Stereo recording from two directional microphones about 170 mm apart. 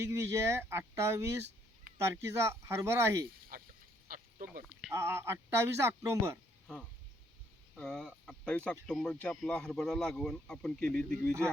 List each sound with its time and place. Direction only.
0.0 s speech: 15° right (ahead or behind)
3.5 s a sound: 60° right (ahead or behind)
4.1 s duck: 55° right (ahead or behind)
4.9 s speech: 15° right (ahead or behind)
7.8 s speech: 5° left (ahead or behind)